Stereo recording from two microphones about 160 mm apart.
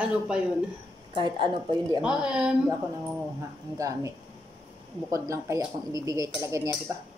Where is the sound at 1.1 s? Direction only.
30° right (ahead or behind).